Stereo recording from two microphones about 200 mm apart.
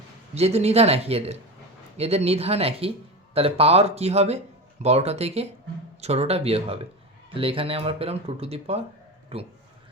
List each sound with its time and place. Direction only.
0.3 s speech: 30° right (ahead or behind)